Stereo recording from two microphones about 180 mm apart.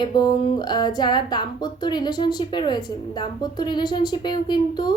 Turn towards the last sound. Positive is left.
turn(degrees=25)  # may be behind; listen again after turning